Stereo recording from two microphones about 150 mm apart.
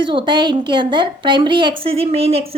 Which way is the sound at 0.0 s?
35° right (ahead or behind).